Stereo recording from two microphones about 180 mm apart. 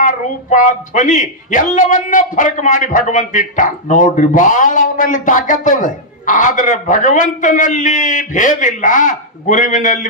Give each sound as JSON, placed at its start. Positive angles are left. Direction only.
{"t": 0.0, "sound": "speech", "side_deg": 45}